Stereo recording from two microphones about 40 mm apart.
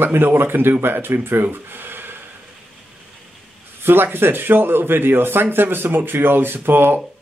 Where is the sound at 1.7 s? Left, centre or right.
Right.